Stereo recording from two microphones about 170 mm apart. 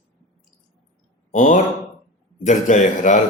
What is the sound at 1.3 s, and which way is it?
A man's voice, 50° left (ahead or behind).